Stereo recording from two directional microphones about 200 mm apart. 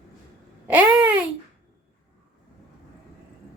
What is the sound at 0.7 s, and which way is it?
Babbling, 10° right (ahead or behind).